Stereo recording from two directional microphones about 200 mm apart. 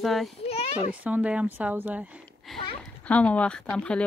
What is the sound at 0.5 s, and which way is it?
Children playing, 30° left (ahead or behind).